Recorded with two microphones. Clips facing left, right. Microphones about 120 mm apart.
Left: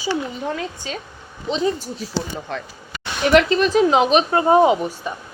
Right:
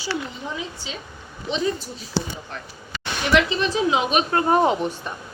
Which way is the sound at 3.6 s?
45° left (ahead or behind).